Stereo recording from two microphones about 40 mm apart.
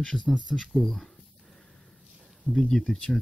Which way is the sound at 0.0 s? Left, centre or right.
Centre.